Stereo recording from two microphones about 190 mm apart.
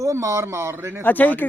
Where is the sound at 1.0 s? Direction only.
10° left (ahead or behind).